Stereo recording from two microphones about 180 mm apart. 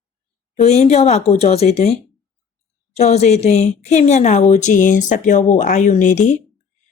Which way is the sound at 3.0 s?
40° left (ahead or behind).